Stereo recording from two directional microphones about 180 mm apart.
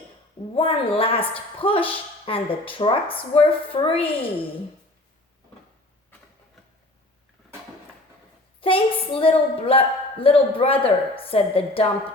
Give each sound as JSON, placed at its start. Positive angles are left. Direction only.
{"t": 0.5, "sound": "a woman's voice", "side_deg": 30}
{"t": 8.6, "sound": "a woman's voice", "side_deg": 30}